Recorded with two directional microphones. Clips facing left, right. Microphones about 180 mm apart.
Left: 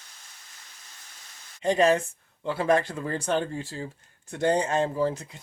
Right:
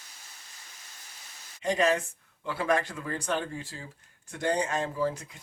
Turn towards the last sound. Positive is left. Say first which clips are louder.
# left 3 dB
turn(degrees=25)  # may be behind; listen again after turning